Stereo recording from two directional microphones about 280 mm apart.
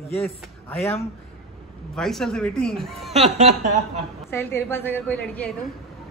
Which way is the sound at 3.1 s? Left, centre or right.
Right.